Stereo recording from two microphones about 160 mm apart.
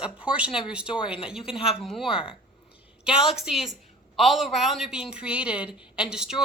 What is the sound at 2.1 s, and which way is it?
Speech, 35° left (ahead or behind).